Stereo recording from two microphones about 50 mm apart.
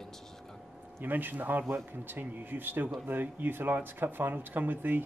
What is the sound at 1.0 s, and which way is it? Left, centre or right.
Speech, right.